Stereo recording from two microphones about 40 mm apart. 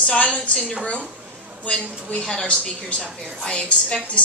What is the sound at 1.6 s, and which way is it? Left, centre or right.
Speech, left.